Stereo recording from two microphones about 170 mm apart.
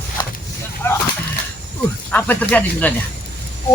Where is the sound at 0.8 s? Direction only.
15° left (ahead or behind).